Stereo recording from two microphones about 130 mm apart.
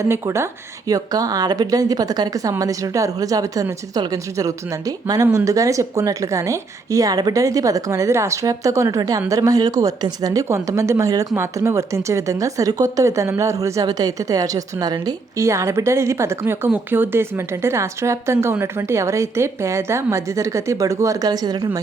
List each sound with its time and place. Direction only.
0.0 s speech: 20° right (ahead or behind)